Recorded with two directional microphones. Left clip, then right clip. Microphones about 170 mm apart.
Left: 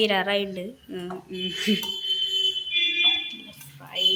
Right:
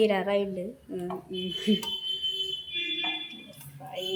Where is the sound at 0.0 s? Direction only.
5° right (ahead or behind).